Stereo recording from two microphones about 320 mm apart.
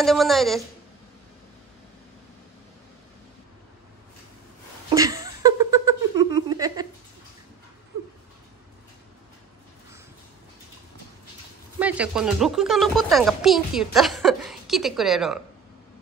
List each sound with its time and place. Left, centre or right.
0.0 s speech: centre
4.8 s a sound: centre
11.8 s speech: centre